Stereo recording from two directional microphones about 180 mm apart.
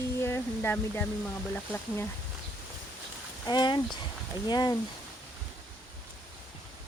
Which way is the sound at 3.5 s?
25° left (ahead or behind).